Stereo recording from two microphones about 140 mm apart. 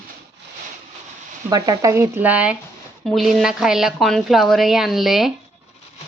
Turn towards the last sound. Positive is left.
turn(degrees=0)  # may be behind; listen again after turning